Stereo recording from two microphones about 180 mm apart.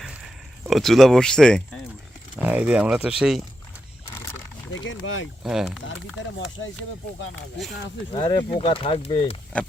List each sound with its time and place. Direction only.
0.6 s speech: centre (ahead or behind)
2.4 s speech: 5° right (ahead or behind)
4.1 s wild animals: 20° left (ahead or behind)
4.7 s speech: 90° left
5.4 s speech: 5° right (ahead or behind)
8.1 s speech: 25° left (ahead or behind)